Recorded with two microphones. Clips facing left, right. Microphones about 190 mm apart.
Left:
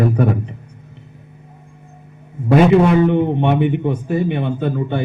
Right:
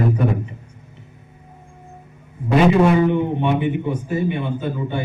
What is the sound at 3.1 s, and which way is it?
Speech, 60° left (ahead or behind).